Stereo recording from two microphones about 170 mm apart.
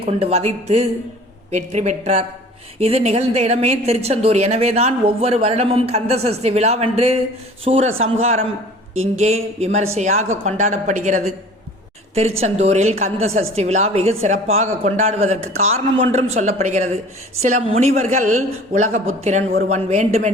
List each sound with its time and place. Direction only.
0.0 s a woman's voice: 35° right (ahead or behind)
12.4 s a woman's voice: 40° right (ahead or behind)